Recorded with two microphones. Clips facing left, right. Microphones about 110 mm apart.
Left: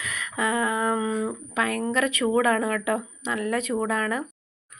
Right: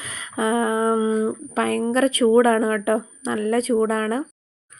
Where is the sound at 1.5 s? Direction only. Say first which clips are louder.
Right 4 dB; 35° right (ahead or behind).